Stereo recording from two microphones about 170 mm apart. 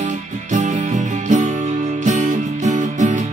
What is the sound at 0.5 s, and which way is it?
Music, 45° right (ahead or behind).